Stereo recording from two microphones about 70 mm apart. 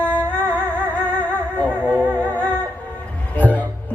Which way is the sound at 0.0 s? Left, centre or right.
Left.